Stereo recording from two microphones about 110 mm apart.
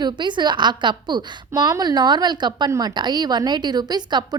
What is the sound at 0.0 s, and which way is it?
A woman's voice, 45° right (ahead or behind).